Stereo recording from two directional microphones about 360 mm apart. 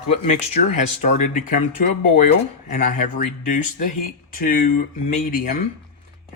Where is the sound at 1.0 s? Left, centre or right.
Centre.